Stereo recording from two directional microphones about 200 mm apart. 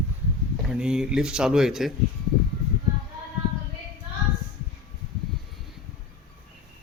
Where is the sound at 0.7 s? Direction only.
5° right (ahead or behind).